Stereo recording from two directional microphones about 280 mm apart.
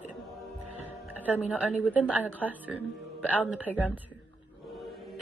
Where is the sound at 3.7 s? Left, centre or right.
Centre.